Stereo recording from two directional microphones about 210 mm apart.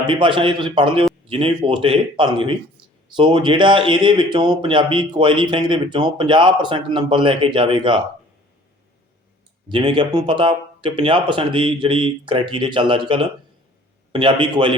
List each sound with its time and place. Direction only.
0.1 s speech: 25° right (ahead or behind)
9.6 s speech: 25° right (ahead or behind)